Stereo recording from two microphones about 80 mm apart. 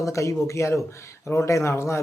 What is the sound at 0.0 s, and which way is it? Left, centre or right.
Speech, left.